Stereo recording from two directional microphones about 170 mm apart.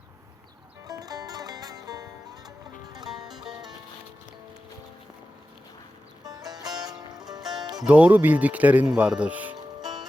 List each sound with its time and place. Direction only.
0.9 s music: 20° right (ahead or behind)
6.2 s music: 25° right (ahead or behind)
7.8 s speech: 10° right (ahead or behind)
9.8 s music: 25° right (ahead or behind)